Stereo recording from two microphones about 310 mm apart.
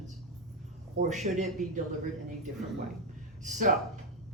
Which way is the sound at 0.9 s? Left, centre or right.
Right.